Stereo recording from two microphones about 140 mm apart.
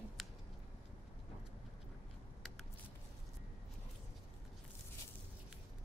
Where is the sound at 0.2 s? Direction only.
Centre (ahead or behind).